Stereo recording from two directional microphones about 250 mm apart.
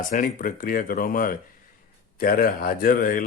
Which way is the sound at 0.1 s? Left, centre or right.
Left.